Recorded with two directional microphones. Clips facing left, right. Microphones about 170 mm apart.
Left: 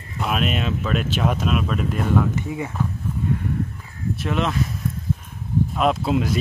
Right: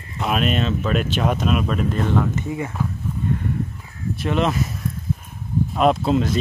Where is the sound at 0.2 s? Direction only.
Centre (ahead or behind).